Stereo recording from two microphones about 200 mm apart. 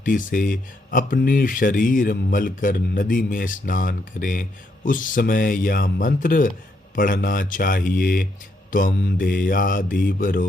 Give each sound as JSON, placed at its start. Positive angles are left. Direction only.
{"t": 0.0, "sound": "speech", "side_deg": 45}